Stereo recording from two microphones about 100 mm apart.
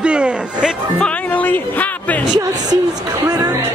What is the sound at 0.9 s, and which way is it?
Music, 10° left (ahead or behind).